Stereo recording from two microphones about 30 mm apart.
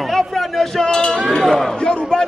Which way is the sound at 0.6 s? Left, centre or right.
Left.